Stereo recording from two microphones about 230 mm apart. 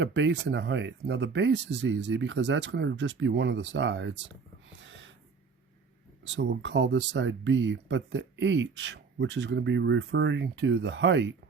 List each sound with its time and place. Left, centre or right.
0.0 s speech: right
4.8 s gasp: right
6.2 s speech: right